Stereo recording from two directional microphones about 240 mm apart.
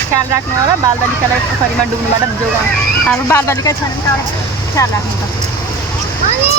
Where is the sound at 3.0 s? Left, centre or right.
Centre.